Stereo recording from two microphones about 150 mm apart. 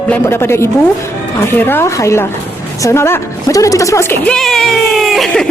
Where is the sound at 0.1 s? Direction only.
15° left (ahead or behind).